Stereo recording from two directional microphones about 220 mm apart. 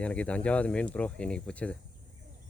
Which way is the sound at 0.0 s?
5° left (ahead or behind).